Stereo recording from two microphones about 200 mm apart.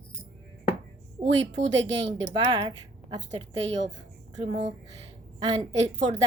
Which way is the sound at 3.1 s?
25° right (ahead or behind).